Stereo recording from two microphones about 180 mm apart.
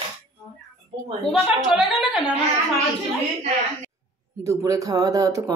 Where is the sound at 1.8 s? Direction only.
Centre (ahead or behind).